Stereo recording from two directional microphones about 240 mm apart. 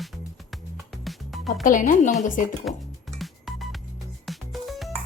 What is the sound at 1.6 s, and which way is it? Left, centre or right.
Speech, left.